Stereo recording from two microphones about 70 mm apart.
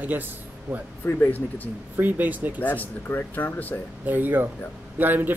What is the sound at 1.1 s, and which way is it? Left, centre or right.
Speech, left.